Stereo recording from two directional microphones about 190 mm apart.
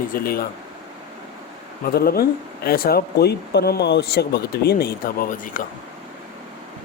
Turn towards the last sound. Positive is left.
turn(degrees=45)  # may be behind; listen again after turning